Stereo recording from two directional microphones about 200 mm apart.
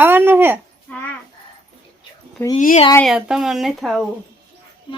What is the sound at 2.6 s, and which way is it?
Speech, 40° left (ahead or behind).